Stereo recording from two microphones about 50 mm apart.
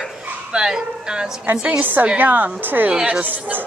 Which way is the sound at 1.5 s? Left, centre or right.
Right.